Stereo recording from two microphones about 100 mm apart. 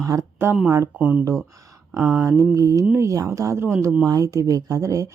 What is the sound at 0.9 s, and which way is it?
Speech, 15° right (ahead or behind).